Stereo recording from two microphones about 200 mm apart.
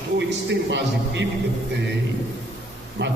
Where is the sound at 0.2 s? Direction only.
60° right (ahead or behind).